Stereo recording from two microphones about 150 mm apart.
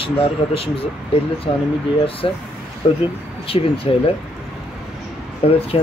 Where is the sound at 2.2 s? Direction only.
35° left (ahead or behind).